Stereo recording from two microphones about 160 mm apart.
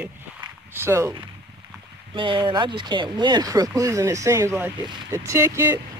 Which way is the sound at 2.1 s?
30° right (ahead or behind).